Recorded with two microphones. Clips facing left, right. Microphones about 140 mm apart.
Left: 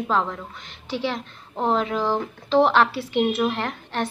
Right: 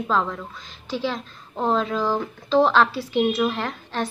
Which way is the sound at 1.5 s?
20° left (ahead or behind).